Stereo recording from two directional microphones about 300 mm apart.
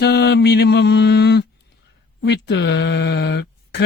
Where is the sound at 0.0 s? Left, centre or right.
Left.